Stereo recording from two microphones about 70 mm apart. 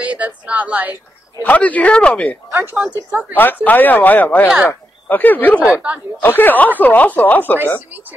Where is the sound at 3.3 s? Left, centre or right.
Left.